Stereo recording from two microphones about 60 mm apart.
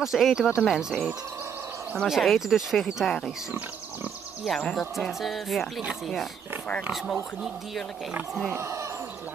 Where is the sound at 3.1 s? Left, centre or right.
Centre.